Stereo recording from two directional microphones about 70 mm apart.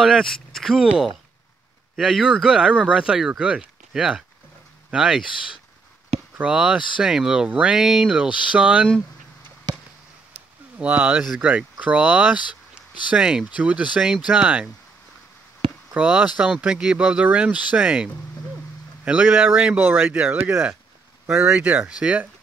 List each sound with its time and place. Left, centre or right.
0.0 s speech: centre
2.0 s speech: centre
2.4 s speech: centre
6.4 s speech: centre
7.4 s speech: right
7.7 s speech: centre
10.8 s speech: right
11.1 s speech: centre
11.8 s speech: right
16.0 s speech: right
16.5 s speech: centre
21.3 s speech: right
21.5 s speech: right